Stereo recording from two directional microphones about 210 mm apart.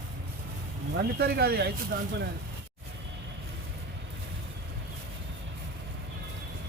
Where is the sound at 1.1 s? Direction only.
50° right (ahead or behind).